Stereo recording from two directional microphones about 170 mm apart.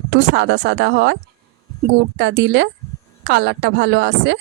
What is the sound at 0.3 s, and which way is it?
A woman's voice, 90° right.